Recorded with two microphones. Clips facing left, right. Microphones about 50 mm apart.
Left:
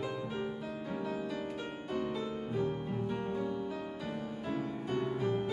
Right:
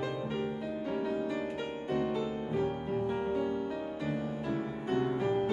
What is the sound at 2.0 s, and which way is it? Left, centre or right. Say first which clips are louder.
Music: right 3 dB; centre.